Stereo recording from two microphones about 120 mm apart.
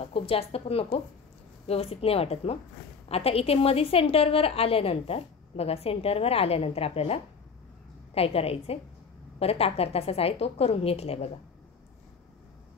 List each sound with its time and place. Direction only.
0.0 s a woman's voice: 55° left (ahead or behind)